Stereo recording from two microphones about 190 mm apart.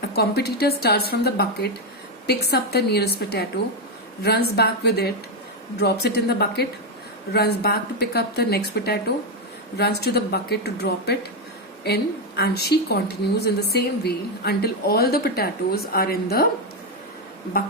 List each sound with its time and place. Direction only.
0.1 s a woman's voice: 55° left (ahead or behind)
12.4 s a woman's voice: 55° left (ahead or behind)
17.5 s a woman's voice: 50° left (ahead or behind)